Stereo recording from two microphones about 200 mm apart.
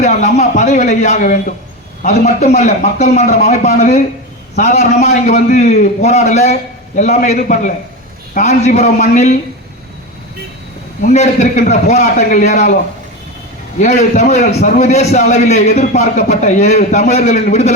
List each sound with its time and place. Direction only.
0.0 s a man's voice: 35° left (ahead or behind)
11.0 s a man's voice: 35° left (ahead or behind)
13.7 s a man's voice: 35° left (ahead or behind)